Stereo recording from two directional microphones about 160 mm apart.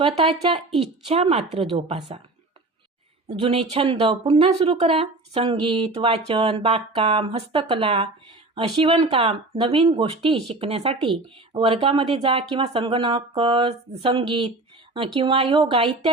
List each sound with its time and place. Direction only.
0.0 s speech: 35° right (ahead or behind)
3.2 s speech: 40° right (ahead or behind)